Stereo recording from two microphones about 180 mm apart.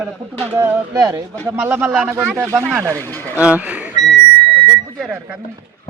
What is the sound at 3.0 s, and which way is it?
Speech, 10° left (ahead or behind).